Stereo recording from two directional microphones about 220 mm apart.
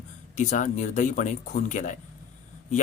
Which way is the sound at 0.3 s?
35° left (ahead or behind).